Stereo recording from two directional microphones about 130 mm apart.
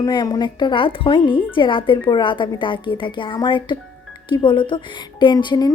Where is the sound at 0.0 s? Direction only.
30° left (ahead or behind).